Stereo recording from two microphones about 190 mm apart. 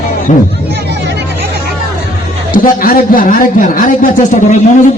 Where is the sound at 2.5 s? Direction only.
50° left (ahead or behind).